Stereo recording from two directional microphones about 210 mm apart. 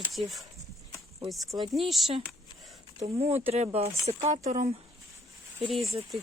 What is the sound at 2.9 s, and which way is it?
Speech, 30° right (ahead or behind).